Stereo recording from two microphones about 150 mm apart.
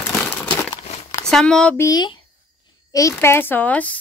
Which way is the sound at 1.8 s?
25° left (ahead or behind).